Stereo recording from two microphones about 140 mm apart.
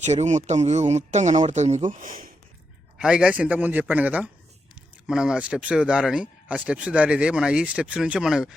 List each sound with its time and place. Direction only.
0.0 s speech: 55° right (ahead or behind); by 2.3 s 85° right
3.0 s speech: 5° right (ahead or behind)